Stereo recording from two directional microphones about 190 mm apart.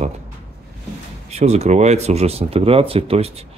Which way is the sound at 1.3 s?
35° right (ahead or behind).